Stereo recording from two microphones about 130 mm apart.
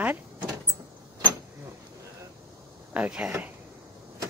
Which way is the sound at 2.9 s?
10° right (ahead or behind).